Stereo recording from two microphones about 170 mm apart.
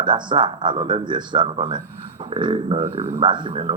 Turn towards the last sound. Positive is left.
turn(degrees=-30)  # may be behind; listen again after turning